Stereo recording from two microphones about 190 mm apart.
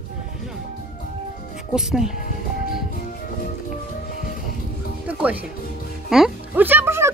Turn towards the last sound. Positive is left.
turn(degrees=-15)  # may be behind; listen again after turning